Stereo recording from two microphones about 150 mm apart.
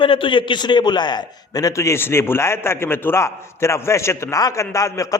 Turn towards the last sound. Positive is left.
turn(degrees=20)  # may be behind; listen again after turning